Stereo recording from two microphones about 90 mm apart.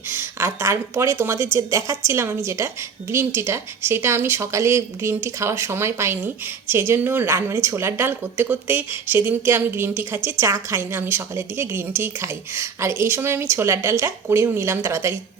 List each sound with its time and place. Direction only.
0.1 s a woman's voice: 25° right (ahead or behind)